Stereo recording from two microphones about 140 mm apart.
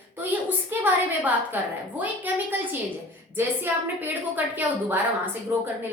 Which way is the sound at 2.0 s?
15° right (ahead or behind).